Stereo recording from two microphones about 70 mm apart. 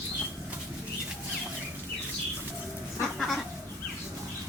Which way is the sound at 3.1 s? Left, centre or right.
Centre.